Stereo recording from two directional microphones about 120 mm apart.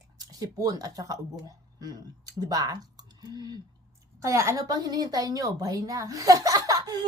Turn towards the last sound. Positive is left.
turn(degrees=-30)  # may be behind; listen again after turning